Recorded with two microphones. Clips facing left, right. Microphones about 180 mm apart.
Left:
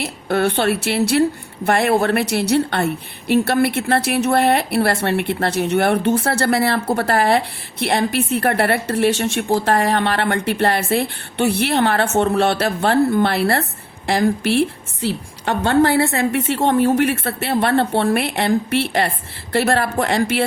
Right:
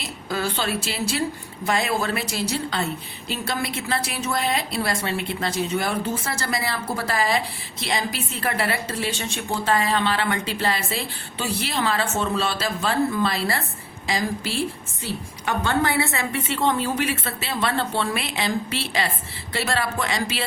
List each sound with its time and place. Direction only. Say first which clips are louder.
0.0 s a woman's voice: left 9 dB; 65° left (ahead or behind)